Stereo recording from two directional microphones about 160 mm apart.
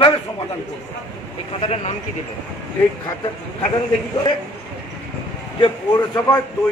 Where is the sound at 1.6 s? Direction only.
40° left (ahead or behind).